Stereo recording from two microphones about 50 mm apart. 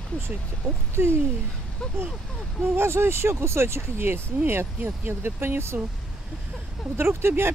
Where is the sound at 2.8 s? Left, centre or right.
Right.